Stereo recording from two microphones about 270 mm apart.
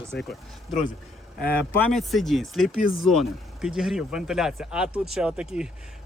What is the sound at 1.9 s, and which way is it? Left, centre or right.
Speech, centre.